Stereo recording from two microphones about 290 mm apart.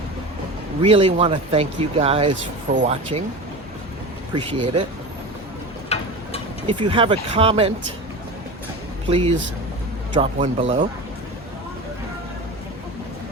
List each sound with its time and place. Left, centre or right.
0.8 s speech: centre
4.4 s speech: centre
5.9 s a sound: left
6.7 s speech: centre
9.0 s speech: centre